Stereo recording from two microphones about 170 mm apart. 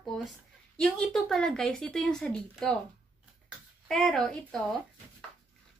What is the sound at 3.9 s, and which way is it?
Speech, centre (ahead or behind).